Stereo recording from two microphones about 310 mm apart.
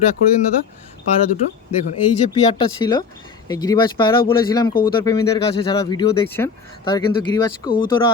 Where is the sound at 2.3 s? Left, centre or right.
Centre.